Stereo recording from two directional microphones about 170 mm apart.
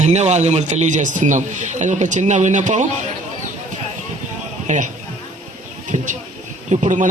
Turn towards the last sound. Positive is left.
turn(degrees=-45)  # may be behind; listen again after turning